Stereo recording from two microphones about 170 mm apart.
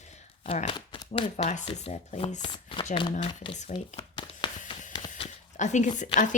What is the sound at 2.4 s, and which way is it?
Speech, 25° left (ahead or behind).